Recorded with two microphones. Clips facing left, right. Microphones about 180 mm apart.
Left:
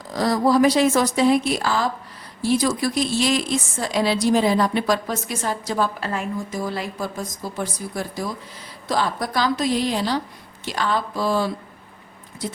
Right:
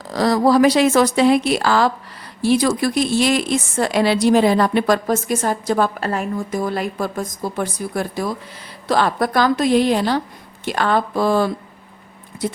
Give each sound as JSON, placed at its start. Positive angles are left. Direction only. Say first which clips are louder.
{"t": 0.1, "sound": "a woman's voice", "louder": "right 4 dB", "side_deg": -80}